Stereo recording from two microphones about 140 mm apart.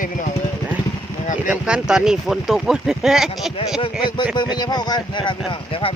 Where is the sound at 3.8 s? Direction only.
35° left (ahead or behind).